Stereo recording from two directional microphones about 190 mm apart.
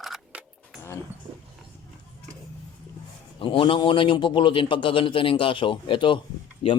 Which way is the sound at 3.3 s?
25° left (ahead or behind).